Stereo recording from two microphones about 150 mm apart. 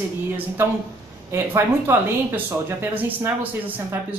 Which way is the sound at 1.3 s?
20° right (ahead or behind).